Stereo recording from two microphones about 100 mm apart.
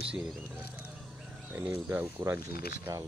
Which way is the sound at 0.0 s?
10° right (ahead or behind).